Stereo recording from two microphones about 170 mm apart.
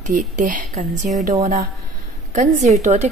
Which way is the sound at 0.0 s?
50° right (ahead or behind).